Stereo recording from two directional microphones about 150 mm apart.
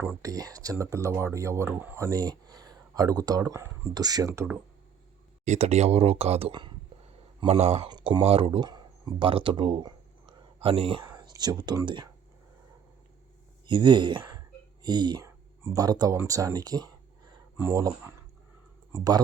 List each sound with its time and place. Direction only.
0.0 s speech: 20° right (ahead or behind)
5.5 s speech: 45° right (ahead or behind)
6.5 s speech: 30° right (ahead or behind)
7.6 s speech: 45° right (ahead or behind)
7.9 s speech: 30° right (ahead or behind)
13.7 s speech: 30° right (ahead or behind)